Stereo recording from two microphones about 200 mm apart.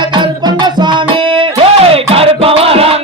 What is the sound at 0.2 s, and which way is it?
Music, 20° right (ahead or behind).